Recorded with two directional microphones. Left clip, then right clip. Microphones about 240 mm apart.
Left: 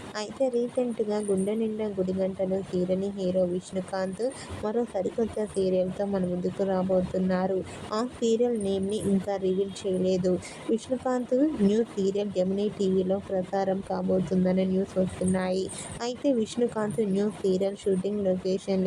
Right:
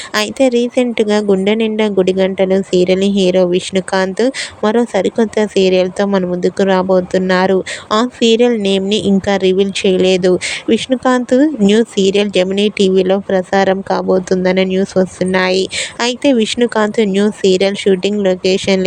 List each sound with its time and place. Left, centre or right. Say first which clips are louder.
0.1 s a woman's voice: right 15 dB; right